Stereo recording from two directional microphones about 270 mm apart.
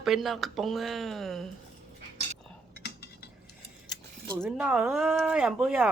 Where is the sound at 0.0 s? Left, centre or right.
Centre.